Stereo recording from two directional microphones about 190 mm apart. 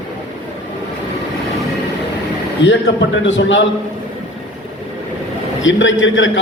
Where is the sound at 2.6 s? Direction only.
70° left (ahead or behind).